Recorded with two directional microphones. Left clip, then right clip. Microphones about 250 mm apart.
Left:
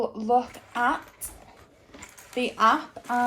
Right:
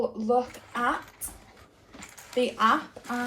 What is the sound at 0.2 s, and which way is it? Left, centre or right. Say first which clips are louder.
Speech: left 2 dB; left.